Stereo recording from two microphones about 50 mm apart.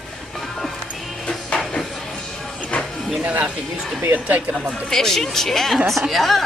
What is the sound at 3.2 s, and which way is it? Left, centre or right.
Speech, right.